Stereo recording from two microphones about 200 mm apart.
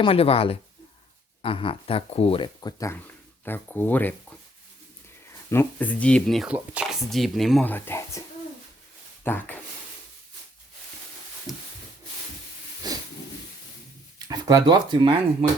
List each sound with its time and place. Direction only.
0.0 s speech: 30° left (ahead or behind); by 4.4 s 10° left (ahead or behind)
5.5 s speech: 10° left (ahead or behind)
9.2 s speech: 10° left (ahead or behind)
11.5 s speech: centre (ahead or behind)
12.8 s hiss: 20° right (ahead or behind)
14.3 s speech: 20° right (ahead or behind)